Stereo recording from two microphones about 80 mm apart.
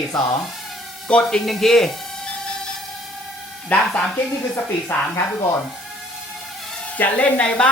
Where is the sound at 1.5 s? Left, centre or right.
Centre.